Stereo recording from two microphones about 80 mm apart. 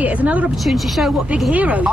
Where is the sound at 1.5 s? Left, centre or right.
Centre.